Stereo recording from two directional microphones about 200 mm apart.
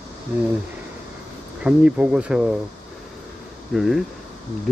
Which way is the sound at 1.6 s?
5° right (ahead or behind).